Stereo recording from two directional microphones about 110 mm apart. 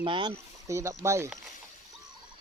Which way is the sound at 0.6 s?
25° right (ahead or behind).